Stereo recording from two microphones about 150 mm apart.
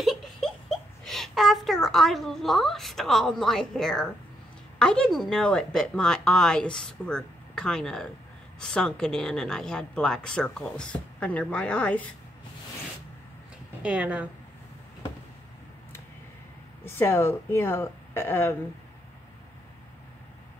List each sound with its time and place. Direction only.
0.0 s a child's voice: centre (ahead or behind)
13.8 s a woman's voice: 10° right (ahead or behind)
16.8 s speech: 15° left (ahead or behind)